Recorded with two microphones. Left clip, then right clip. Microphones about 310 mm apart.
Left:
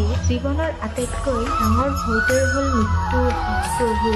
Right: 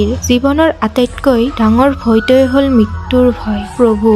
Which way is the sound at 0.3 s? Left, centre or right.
Right.